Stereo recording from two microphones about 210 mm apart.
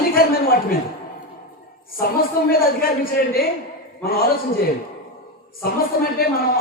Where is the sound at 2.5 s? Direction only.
45° left (ahead or behind).